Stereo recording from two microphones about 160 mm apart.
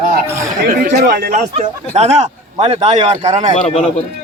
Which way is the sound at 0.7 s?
70° right (ahead or behind).